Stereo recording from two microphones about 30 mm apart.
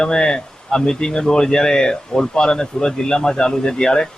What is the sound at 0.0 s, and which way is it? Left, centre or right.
A man's voice, left.